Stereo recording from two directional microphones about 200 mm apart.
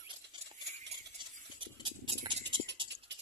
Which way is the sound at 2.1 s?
25° right (ahead or behind).